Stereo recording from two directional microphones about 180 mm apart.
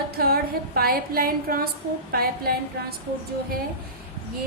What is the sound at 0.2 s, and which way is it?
A woman's voice, 55° right (ahead or behind).